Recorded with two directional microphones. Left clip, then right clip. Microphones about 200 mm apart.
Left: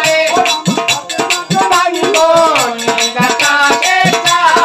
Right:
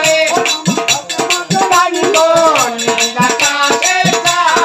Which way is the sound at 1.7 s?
15° left (ahead or behind).